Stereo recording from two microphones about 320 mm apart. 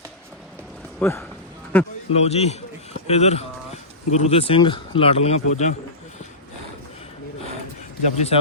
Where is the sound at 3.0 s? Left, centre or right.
Centre.